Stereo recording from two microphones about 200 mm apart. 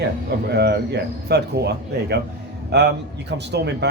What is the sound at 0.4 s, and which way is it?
Speech, 55° right (ahead or behind).